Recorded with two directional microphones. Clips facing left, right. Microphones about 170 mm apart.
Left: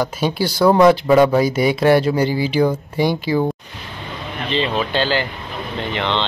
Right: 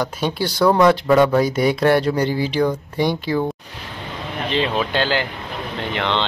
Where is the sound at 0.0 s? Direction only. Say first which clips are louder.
Left 2 dB; 5° left (ahead or behind).